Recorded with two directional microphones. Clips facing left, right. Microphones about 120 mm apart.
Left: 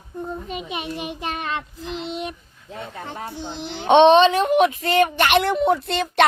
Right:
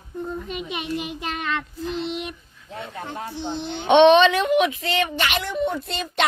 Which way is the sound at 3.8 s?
35° left (ahead or behind).